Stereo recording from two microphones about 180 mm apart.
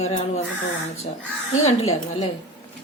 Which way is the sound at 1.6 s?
35° left (ahead or behind).